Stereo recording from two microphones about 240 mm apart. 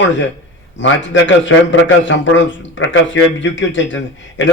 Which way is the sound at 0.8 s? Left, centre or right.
Left.